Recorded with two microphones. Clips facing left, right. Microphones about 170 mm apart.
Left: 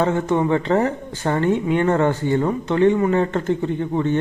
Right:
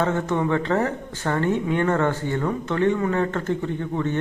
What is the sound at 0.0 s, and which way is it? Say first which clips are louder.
A man's voice: left 4 dB; 15° left (ahead or behind).